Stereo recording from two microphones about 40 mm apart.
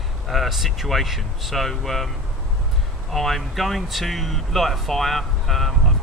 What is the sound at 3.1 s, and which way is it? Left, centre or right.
Speech, centre.